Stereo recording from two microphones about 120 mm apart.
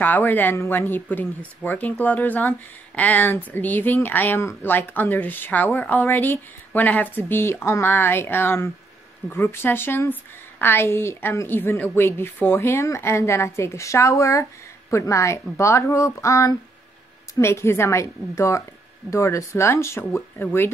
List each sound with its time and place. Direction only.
0.0 s a woman's voice: 15° left (ahead or behind)